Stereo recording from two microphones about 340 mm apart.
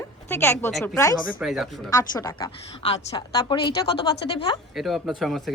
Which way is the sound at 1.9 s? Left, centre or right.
Centre.